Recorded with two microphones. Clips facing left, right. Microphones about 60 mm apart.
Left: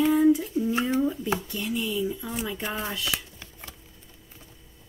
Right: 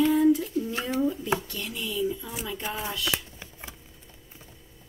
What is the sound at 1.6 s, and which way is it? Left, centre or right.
Speech, centre.